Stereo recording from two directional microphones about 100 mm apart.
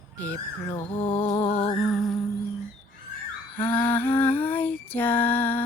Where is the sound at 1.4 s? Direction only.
90° left.